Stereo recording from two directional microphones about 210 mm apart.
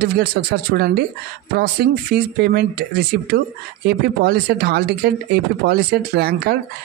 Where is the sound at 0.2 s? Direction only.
50° right (ahead or behind).